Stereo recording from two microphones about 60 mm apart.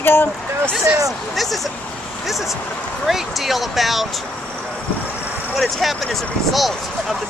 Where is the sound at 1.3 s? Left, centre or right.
Centre.